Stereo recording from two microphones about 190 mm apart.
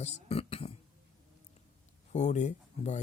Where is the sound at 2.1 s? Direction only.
40° left (ahead or behind).